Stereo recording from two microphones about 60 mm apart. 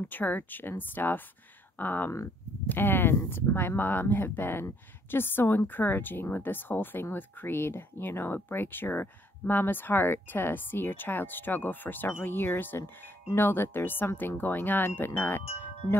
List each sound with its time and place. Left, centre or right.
0.1 s speech: left